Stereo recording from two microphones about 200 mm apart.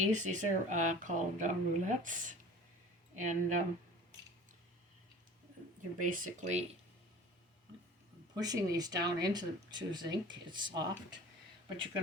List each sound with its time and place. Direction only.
0.1 s speech: 40° right (ahead or behind)
6.0 s speech: 40° right (ahead or behind)
8.4 s speech: 20° right (ahead or behind)